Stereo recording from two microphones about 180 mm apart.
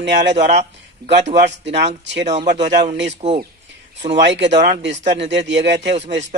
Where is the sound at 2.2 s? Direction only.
40° right (ahead or behind).